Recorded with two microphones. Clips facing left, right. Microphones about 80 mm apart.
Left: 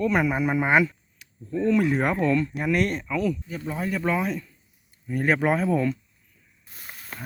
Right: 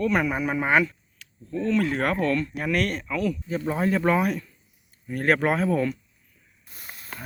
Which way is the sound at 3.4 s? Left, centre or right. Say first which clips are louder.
Right 5 dB; right.